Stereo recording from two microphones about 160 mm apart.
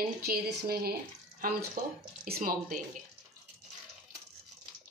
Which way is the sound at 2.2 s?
65° right (ahead or behind).